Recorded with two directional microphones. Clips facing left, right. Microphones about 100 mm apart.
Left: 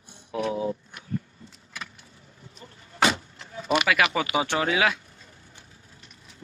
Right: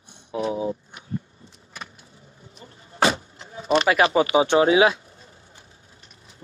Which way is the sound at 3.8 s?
30° right (ahead or behind).